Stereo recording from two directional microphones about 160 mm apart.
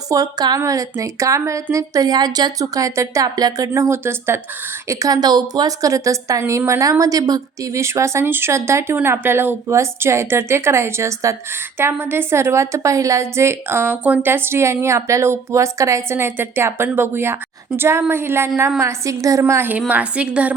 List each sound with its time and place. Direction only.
0.1 s a woman's voice: 25° right (ahead or behind); by 20.5 s 5° right (ahead or behind)